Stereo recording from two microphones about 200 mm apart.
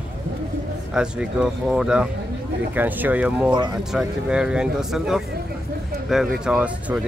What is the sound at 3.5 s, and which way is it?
Speech, 20° right (ahead or behind).